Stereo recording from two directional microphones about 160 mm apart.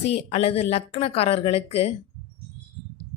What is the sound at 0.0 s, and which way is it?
Speech, 40° left (ahead or behind).